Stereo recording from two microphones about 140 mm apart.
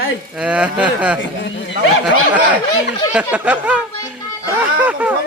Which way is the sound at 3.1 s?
10° right (ahead or behind).